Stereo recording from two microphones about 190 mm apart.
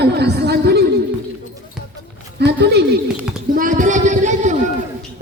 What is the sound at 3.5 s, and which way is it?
A man's voice, 45° right (ahead or behind).